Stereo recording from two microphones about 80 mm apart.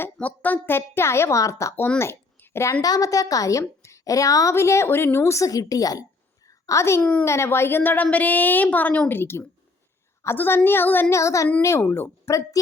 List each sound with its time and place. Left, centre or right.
0.0 s a woman's voice: centre; by 1.7 s left
2.0 s a sound: left
2.8 s a woman's voice: left
4.5 s a woman's voice: left
6.5 s a sound: left
7.0 s a woman's voice: centre
7.3 s a woman's voice: left
11.1 s a woman's voice: left